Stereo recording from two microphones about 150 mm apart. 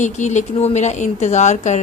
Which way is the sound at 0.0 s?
50° left (ahead or behind).